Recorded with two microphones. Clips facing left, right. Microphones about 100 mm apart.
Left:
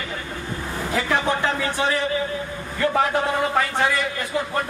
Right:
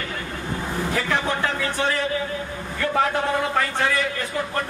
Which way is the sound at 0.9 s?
15° left (ahead or behind).